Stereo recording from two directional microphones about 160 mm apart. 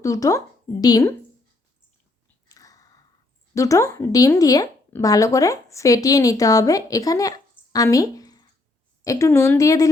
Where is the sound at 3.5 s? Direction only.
20° left (ahead or behind).